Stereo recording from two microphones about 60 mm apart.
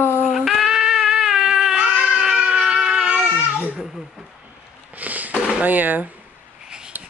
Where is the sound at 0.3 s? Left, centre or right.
Centre.